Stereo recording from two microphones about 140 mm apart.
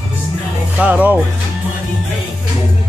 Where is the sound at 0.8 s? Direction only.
10° right (ahead or behind).